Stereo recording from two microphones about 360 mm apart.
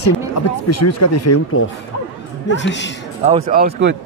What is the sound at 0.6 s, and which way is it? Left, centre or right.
Speech, left.